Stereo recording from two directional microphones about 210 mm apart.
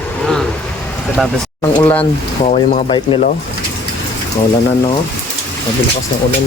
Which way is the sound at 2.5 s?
35° left (ahead or behind).